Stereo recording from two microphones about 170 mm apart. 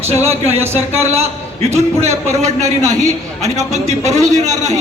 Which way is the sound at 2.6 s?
20° right (ahead or behind).